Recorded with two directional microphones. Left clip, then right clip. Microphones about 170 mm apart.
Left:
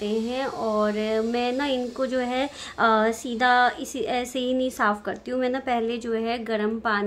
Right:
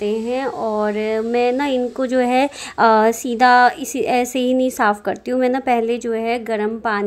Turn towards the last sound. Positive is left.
turn(degrees=-30)  # may be behind; listen again after turning